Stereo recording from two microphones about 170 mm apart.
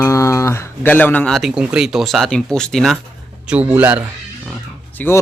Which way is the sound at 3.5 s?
10° right (ahead or behind).